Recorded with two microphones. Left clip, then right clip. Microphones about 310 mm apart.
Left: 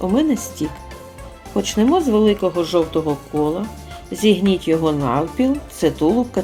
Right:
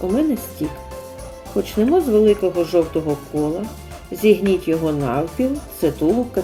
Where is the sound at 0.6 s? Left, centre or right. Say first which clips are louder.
Even; left.